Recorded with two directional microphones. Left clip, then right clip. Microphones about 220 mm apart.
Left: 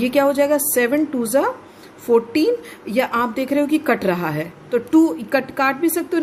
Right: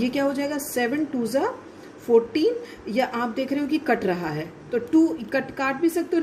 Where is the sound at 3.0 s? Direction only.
40° left (ahead or behind).